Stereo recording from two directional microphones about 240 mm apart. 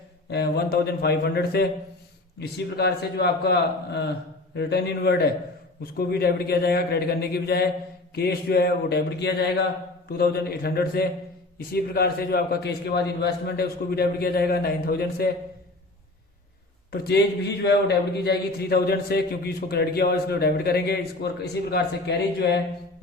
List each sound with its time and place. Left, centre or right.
0.3 s a man's voice: left
16.9 s a man's voice: left